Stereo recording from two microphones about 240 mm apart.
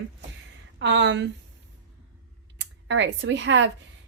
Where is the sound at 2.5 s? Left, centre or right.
Right.